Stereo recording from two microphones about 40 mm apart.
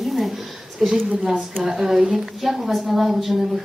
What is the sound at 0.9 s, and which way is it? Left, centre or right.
A woman's voice, centre.